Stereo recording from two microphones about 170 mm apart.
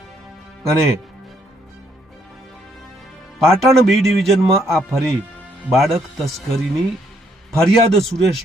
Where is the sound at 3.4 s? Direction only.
Centre (ahead or behind).